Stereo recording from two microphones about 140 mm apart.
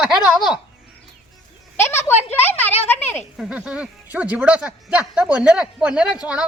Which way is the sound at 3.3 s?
5° right (ahead or behind).